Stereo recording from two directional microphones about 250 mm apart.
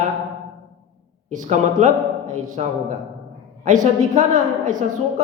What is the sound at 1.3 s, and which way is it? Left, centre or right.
A woman's voice, right.